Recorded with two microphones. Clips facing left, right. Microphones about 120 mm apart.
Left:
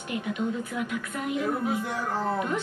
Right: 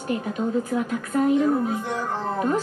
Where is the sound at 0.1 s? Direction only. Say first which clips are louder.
Right 5 dB; 35° right (ahead or behind).